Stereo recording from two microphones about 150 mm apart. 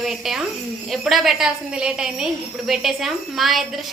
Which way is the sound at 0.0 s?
5° right (ahead or behind).